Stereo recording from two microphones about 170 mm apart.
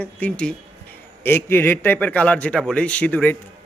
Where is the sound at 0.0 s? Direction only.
10° left (ahead or behind).